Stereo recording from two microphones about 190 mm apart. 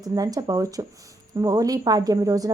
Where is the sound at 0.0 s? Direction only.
20° right (ahead or behind).